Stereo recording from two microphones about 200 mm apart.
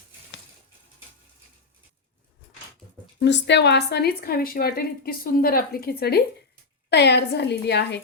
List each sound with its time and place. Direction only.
3.2 s a woman's voice: 60° left (ahead or behind)